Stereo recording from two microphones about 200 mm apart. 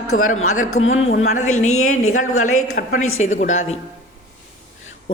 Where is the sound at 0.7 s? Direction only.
80° left.